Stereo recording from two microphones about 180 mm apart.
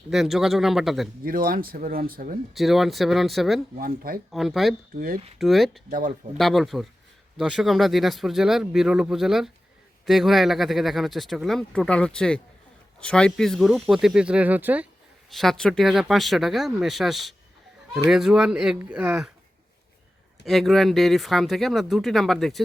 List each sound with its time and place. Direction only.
0.1 s speech: centre (ahead or behind)
1.2 s speech: 50° right (ahead or behind)
2.6 s speech: centre (ahead or behind)
3.8 s speech: 50° right (ahead or behind)
4.3 s speech: centre (ahead or behind)
15.3 s speech: centre (ahead or behind)
20.4 s speech: centre (ahead or behind)